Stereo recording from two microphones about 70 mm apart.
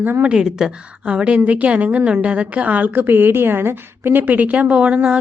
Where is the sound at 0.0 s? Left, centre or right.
Right.